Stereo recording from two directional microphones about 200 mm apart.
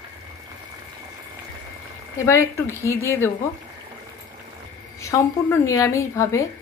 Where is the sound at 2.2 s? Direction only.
15° left (ahead or behind).